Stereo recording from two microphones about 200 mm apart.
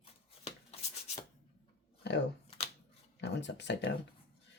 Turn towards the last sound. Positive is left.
turn(degrees=60)  # may be behind; listen again after turning